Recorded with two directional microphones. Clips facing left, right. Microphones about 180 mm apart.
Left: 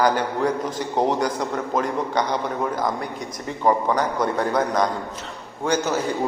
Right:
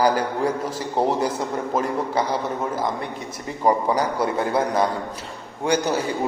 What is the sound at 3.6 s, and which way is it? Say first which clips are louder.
A man's voice: even; 10° right (ahead or behind).